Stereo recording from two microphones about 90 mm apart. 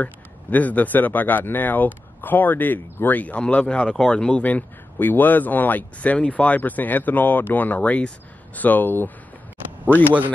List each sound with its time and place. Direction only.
0.0 s speech: 15° left (ahead or behind)
10.0 s speech: 20° right (ahead or behind)